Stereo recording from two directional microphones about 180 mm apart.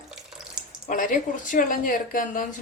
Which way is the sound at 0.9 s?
50° left (ahead or behind).